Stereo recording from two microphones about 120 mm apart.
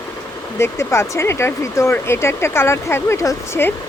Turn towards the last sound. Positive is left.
turn(degrees=25)  # may be behind; listen again after turning